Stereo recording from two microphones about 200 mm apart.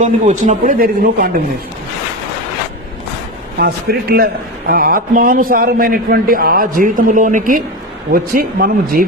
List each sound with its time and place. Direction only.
0.0 s a man's voice: 40° right (ahead or behind)
3.6 s a man's voice: 50° right (ahead or behind)